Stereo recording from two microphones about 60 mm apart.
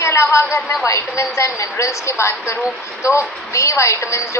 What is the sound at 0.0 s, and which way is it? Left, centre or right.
A woman's voice, left.